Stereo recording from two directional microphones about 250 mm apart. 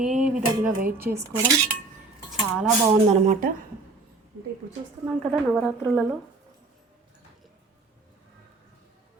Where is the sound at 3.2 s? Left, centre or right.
Right.